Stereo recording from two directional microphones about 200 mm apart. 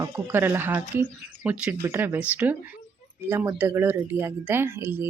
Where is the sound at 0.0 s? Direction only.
10° right (ahead or behind).